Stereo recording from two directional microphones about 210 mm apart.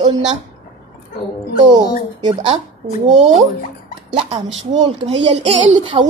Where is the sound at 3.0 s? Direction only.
35° right (ahead or behind).